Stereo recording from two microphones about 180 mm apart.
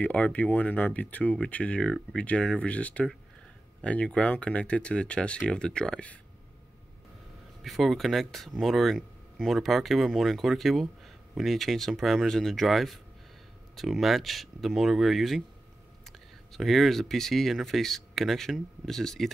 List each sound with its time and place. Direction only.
0.0 s speech: 10° left (ahead or behind)
7.6 s speech: centre (ahead or behind)